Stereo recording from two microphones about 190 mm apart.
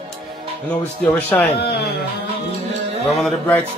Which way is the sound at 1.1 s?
10° left (ahead or behind).